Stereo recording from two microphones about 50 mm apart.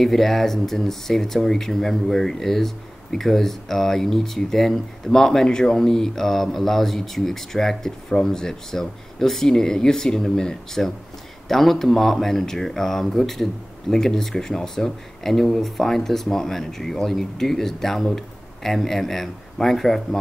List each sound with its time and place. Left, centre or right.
0.0 s speech: centre